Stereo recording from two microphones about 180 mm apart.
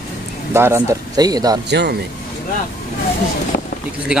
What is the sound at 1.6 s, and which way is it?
Speech, 70° right (ahead or behind).